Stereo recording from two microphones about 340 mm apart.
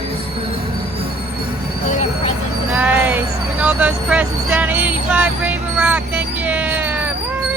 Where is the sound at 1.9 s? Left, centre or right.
Centre.